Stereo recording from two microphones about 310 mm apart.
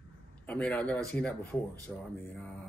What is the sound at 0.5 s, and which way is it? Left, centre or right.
A man's voice, centre.